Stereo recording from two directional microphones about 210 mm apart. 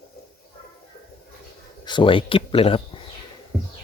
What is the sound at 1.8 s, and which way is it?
Speech, 20° left (ahead or behind).